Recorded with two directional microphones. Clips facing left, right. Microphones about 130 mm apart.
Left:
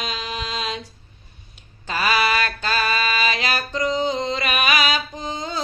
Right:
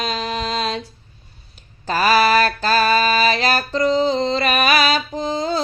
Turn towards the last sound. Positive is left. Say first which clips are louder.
# right 8 dB
turn(degrees=-35)  # may be behind; listen again after turning